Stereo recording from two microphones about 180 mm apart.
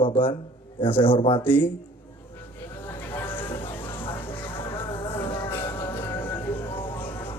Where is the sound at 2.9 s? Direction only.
10° left (ahead or behind).